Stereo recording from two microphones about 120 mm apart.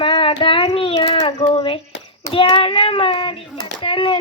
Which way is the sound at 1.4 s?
55° left (ahead or behind).